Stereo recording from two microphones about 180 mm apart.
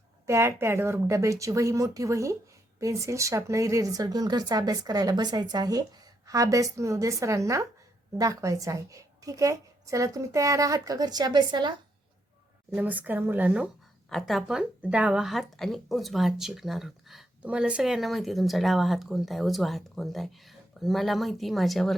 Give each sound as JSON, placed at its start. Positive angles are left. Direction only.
{"t": 0.3, "sound": "a woman's voice", "side_deg": -15}
{"t": 12.7, "sound": "a woman's voice", "side_deg": -10}